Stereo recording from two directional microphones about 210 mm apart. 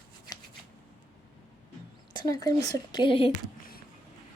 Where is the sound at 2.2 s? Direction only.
20° left (ahead or behind).